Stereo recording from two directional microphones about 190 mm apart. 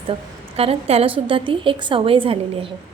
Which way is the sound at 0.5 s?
30° right (ahead or behind).